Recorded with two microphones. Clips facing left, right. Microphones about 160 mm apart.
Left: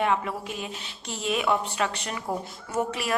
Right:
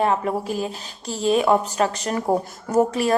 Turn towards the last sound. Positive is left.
turn(degrees=-35)  # may be behind; listen again after turning